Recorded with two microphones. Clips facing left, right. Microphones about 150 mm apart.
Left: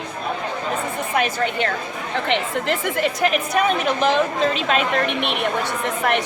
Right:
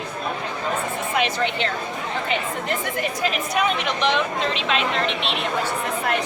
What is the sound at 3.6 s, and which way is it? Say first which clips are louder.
A woman's voice: left 3 dB; 45° left (ahead or behind).